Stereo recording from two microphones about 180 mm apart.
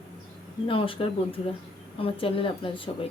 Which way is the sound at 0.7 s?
30° left (ahead or behind).